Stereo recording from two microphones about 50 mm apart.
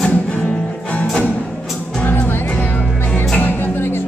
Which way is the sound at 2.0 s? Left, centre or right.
Left.